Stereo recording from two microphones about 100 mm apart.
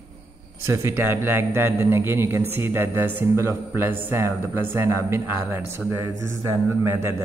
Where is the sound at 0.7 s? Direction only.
25° right (ahead or behind).